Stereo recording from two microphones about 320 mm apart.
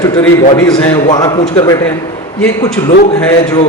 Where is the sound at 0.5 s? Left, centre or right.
Centre.